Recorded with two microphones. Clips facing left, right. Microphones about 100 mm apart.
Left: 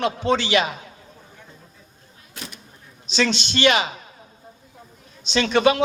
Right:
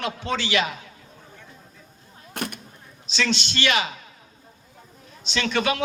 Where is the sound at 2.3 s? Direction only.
55° right (ahead or behind).